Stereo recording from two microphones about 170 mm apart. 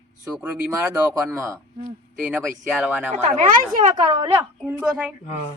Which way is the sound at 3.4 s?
45° right (ahead or behind).